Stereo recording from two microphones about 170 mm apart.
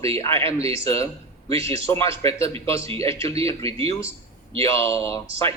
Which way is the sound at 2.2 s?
35° right (ahead or behind).